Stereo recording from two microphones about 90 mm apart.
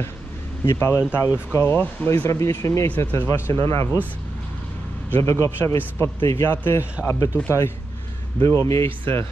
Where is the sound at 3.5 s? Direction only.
90° right.